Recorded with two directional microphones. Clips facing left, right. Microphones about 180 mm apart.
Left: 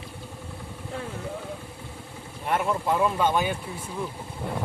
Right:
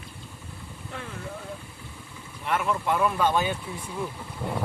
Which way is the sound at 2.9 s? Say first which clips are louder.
Even; 20° left (ahead or behind).